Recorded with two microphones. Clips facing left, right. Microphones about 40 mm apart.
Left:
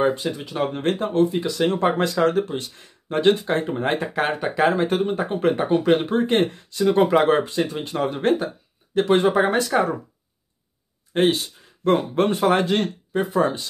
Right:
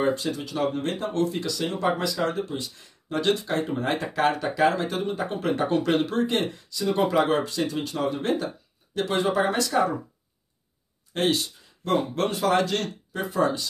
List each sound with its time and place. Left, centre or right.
0.0 s speech: left
1.2 s speech: centre
1.6 s speech: left
5.7 s speech: centre
6.2 s speech: left
11.1 s speech: left